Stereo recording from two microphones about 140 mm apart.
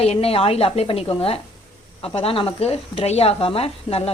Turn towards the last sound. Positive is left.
turn(degrees=45)  # may be behind; listen again after turning